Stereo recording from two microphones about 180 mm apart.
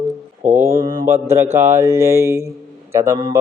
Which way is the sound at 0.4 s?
40° right (ahead or behind).